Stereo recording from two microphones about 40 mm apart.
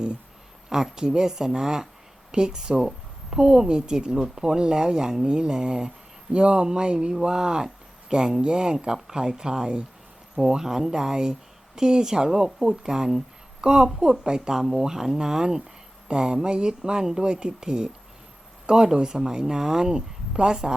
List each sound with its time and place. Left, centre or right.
0.7 s a woman's voice: centre